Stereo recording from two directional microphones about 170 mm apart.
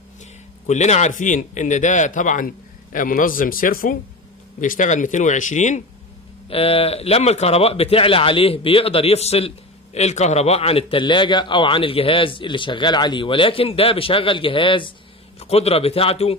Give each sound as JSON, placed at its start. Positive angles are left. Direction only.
{"t": 0.7, "sound": "speech", "side_deg": 40}
{"t": 6.5, "sound": "a man's voice", "side_deg": 35}